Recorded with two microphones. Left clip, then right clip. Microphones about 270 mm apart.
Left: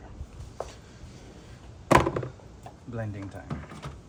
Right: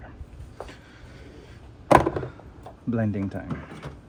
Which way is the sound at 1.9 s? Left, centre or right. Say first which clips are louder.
Right 3 dB; centre.